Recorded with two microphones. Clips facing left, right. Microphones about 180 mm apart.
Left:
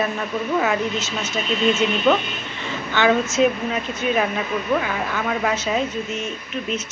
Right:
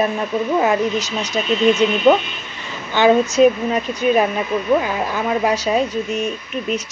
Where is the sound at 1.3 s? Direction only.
15° right (ahead or behind).